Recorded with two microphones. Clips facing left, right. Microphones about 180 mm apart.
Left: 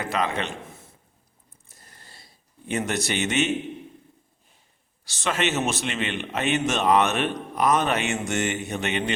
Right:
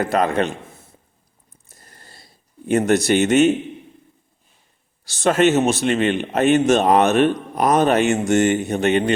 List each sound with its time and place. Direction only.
0.0 s a man's voice: 45° right (ahead or behind)
1.8 s a sound: 45° right (ahead or behind)
2.6 s speech: 40° right (ahead or behind)
5.2 s speech: 40° right (ahead or behind)